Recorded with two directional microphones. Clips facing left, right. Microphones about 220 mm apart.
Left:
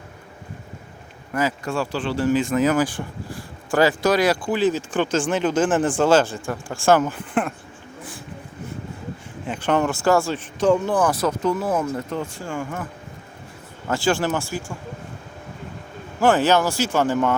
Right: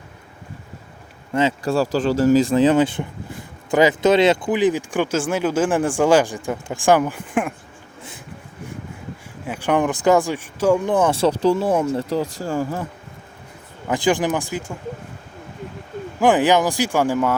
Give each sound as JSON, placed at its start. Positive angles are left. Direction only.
{"t": 1.3, "sound": "speech", "side_deg": -25}
{"t": 9.5, "sound": "speech", "side_deg": -10}
{"t": 13.8, "sound": "speech", "side_deg": -15}
{"t": 16.2, "sound": "speech", "side_deg": -15}